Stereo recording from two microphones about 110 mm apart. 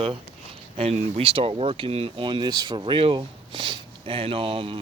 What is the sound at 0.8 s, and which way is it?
Speech, 65° right (ahead or behind).